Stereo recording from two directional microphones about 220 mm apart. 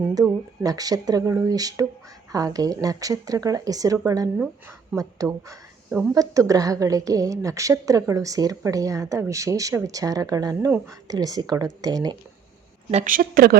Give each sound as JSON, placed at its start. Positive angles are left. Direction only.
{"t": 0.1, "sound": "a woman's voice", "side_deg": -15}
{"t": 12.9, "sound": "a woman's voice", "side_deg": -35}